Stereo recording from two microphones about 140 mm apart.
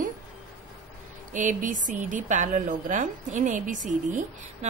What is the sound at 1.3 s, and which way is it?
A woman's voice, 65° right (ahead or behind).